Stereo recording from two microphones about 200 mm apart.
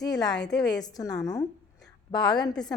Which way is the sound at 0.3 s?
60° left (ahead or behind).